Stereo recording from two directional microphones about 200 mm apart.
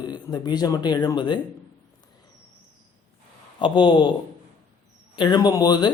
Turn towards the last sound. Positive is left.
turn(degrees=20)  # may be behind; listen again after turning